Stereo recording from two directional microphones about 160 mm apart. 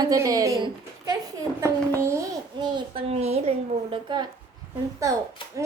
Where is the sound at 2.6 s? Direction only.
30° right (ahead or behind).